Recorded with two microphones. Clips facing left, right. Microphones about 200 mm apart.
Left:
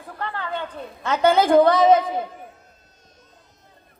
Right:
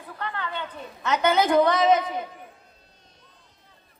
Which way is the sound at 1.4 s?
30° left (ahead or behind).